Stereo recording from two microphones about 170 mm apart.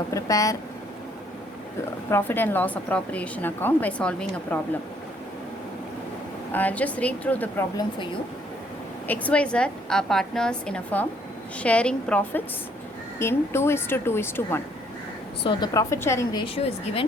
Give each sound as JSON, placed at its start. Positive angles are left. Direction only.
{"t": 0.1, "sound": "a woman's voice", "side_deg": 20}
{"t": 2.0, "sound": "speech", "side_deg": 15}
{"t": 6.5, "sound": "speech", "side_deg": 10}
{"t": 9.0, "sound": "a woman's voice", "side_deg": 10}
{"t": 16.4, "sound": "a woman's voice", "side_deg": 35}